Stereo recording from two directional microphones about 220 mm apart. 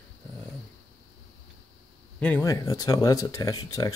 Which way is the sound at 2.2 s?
10° left (ahead or behind).